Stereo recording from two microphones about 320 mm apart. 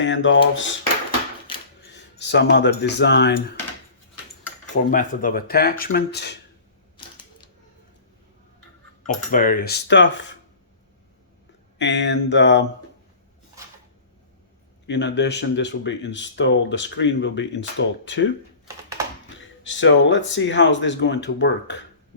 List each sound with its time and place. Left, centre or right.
0.0 s speech: left
1.5 s a sound: centre
1.9 s speech: left
4.9 s speech: left
9.0 s speech: left
11.8 s speech: left
14.8 s speech: left
18.6 s typing: centre
19.6 s speech: left